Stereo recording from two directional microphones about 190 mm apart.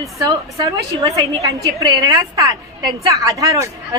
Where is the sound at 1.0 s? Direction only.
15° right (ahead or behind).